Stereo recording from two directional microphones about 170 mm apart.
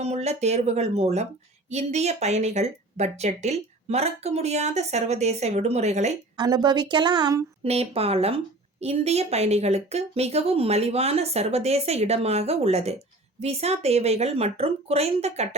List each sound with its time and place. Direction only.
0.0 s speech: 40° right (ahead or behind)
6.3 s a woman's voice: 25° right (ahead or behind)
7.6 s speech: 35° right (ahead or behind)